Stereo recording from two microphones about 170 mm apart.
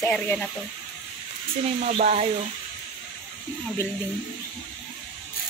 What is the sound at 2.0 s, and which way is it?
Speech, 40° right (ahead or behind).